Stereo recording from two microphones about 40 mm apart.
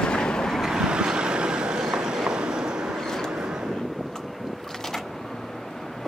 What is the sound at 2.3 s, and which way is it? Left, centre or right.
Train, centre.